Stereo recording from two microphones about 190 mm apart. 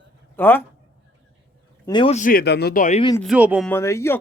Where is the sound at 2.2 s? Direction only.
50° left (ahead or behind).